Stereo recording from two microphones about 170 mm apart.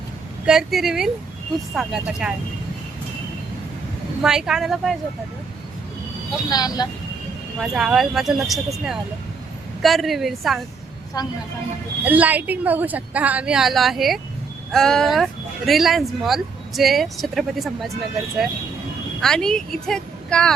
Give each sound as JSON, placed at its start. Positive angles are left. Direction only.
{"t": 0.4, "sound": "speech", "side_deg": 0}
{"t": 4.2, "sound": "speech", "side_deg": -5}
{"t": 6.5, "sound": "speech", "side_deg": 25}
{"t": 7.6, "sound": "speech", "side_deg": -5}
{"t": 11.1, "sound": "speech", "side_deg": 20}
{"t": 12.0, "sound": "a woman's voice", "side_deg": -10}
{"t": 19.2, "sound": "speech", "side_deg": 5}